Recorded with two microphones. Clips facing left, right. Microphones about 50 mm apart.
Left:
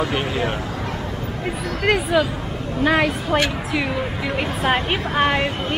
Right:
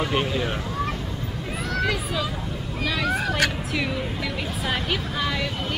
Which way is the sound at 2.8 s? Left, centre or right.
Left.